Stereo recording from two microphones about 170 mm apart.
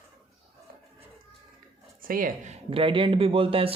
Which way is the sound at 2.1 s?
55° right (ahead or behind).